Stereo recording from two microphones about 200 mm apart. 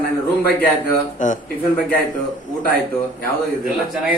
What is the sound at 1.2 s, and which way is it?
Speech, 40° left (ahead or behind).